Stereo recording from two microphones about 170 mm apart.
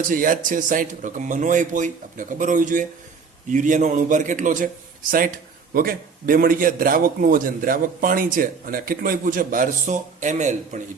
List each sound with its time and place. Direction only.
0.1 s speech: 55° right (ahead or behind)
5.7 s a man's voice: 60° right (ahead or behind)